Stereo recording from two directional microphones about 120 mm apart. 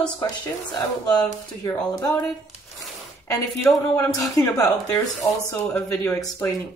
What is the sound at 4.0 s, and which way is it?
A woman's voice, 30° left (ahead or behind).